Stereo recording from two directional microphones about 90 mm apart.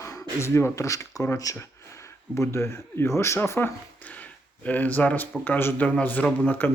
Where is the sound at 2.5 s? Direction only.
30° left (ahead or behind).